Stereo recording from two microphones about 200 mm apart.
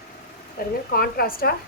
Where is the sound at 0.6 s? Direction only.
45° left (ahead or behind).